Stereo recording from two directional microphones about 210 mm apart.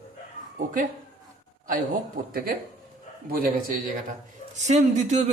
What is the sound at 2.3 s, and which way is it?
Speech, 45° right (ahead or behind).